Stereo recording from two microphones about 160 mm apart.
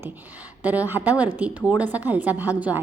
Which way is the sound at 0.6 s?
10° right (ahead or behind).